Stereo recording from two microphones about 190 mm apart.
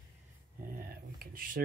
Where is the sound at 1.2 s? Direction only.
50° right (ahead or behind).